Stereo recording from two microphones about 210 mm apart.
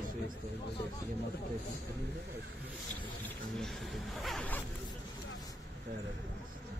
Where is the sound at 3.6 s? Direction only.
Centre (ahead or behind).